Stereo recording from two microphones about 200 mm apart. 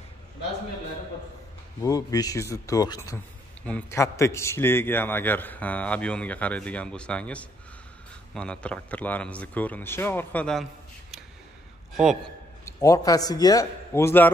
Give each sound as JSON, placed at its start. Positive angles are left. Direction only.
{"t": 1.8, "sound": "a man's voice", "side_deg": 15}
{"t": 12.6, "sound": "a man's voice", "side_deg": 15}